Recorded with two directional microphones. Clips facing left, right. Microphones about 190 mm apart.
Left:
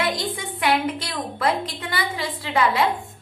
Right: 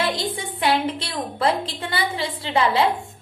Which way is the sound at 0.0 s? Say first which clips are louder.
Right 1 dB; 30° right (ahead or behind).